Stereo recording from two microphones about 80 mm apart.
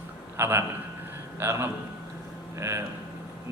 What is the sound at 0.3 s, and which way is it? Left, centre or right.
A man's voice, right.